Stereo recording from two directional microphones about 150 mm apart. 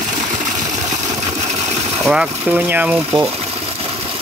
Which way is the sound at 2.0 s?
5° right (ahead or behind).